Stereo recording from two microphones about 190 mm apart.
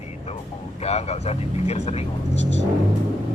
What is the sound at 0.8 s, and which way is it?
Speech, 35° left (ahead or behind).